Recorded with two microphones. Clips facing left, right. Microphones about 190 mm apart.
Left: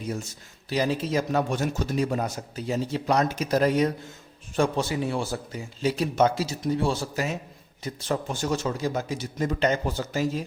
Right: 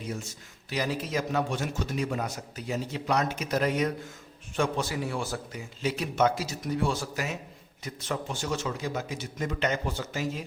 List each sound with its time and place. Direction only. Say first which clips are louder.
0.7 s a man's voice: left 5 dB; 30° left (ahead or behind)
1.5 s a man's voice: left 4 dB; 40° left (ahead or behind)